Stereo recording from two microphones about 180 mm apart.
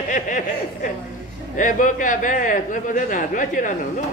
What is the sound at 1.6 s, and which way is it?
Speech, 45° left (ahead or behind).